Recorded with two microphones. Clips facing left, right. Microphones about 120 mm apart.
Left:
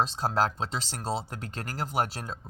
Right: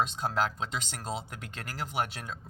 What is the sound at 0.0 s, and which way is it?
Speech, 35° left (ahead or behind).